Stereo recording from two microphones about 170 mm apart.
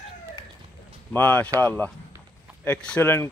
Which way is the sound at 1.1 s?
10° left (ahead or behind).